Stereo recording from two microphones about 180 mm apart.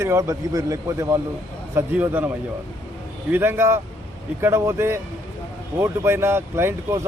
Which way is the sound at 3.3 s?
15° right (ahead or behind).